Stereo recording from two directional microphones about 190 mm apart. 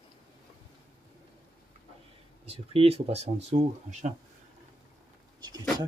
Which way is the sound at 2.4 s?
30° right (ahead or behind).